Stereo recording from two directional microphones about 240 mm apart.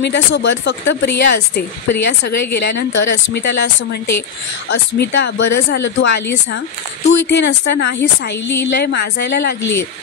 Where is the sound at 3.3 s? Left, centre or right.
Left.